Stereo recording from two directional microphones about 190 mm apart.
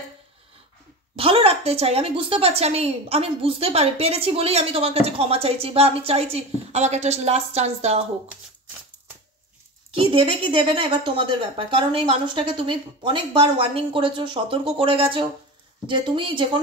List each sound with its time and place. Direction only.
1.1 s a woman's voice: 30° right (ahead or behind)
9.8 s a woman's voice: 30° right (ahead or behind)